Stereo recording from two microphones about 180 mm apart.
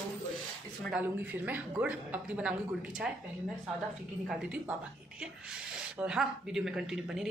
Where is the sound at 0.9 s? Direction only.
5° right (ahead or behind).